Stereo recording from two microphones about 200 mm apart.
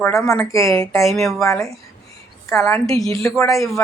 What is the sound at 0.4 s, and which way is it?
Speech, 15° left (ahead or behind).